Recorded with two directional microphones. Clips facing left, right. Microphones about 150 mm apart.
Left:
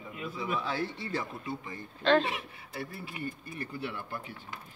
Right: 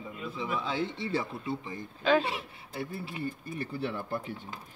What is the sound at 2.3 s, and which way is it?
Speech, 30° right (ahead or behind).